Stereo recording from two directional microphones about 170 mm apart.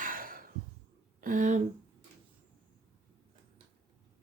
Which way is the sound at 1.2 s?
50° right (ahead or behind).